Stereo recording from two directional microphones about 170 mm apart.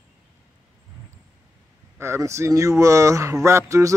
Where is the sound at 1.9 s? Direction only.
15° right (ahead or behind).